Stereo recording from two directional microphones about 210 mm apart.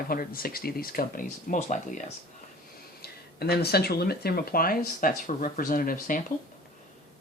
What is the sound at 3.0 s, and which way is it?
Speech, 50° left (ahead or behind).